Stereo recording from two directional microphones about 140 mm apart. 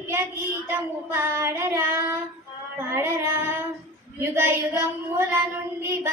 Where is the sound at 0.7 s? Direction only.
20° right (ahead or behind).